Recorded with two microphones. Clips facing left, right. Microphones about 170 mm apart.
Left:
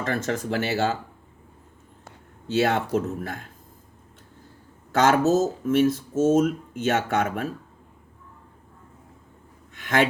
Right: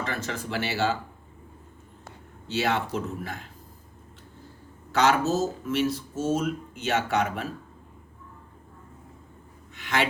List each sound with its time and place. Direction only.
0.0 s speech: 45° left (ahead or behind)
2.5 s speech: 45° left (ahead or behind)
4.9 s speech: 45° left (ahead or behind)
9.7 s a sound: 45° left (ahead or behind)